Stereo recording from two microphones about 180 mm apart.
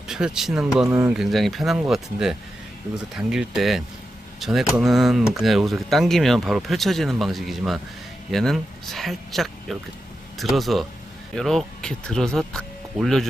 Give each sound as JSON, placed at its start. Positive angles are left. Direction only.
{"t": 0.1, "sound": "speech", "side_deg": -5}
{"t": 0.9, "sound": "speech", "side_deg": -15}
{"t": 1.1, "sound": "speech", "side_deg": 0}